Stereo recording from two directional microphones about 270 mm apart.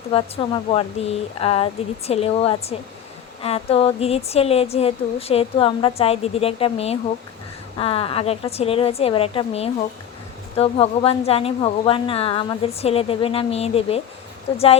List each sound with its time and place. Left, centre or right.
0.1 s speech: centre